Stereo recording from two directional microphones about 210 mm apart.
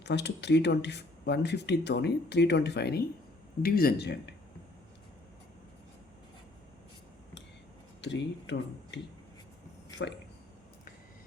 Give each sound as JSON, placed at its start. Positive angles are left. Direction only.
{"t": 0.0, "sound": "speech", "side_deg": 55}
{"t": 8.0, "sound": "speech", "side_deg": 60}
{"t": 10.0, "sound": "speech", "side_deg": 60}